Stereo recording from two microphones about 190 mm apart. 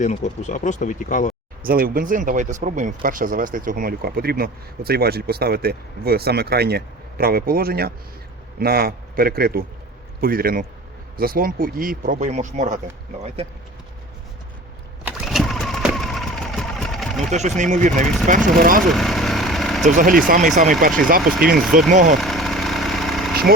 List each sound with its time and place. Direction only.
0.0 s speech: 40° left (ahead or behind)
1.6 s speech: 50° right (ahead or behind); by 13.5 s 30° right (ahead or behind)
15.0 s a sound: centre (ahead or behind)
17.3 s speech: 40° right (ahead or behind)
18.0 s speech: centre (ahead or behind)
18.3 s speech: 45° right (ahead or behind)
18.9 s a sound: centre (ahead or behind)
19.8 s speech: 45° right (ahead or behind)
22.2 s engine: centre (ahead or behind)